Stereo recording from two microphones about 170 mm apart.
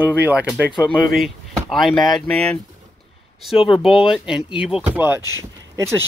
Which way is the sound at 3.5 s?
30° left (ahead or behind).